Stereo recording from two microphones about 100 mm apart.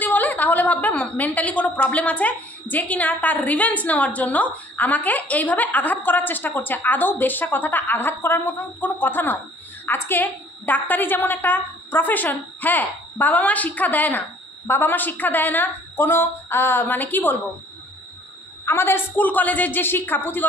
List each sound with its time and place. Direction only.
0.0 s a woman's voice: 15° left (ahead or behind)
18.7 s a woman's voice: 25° left (ahead or behind)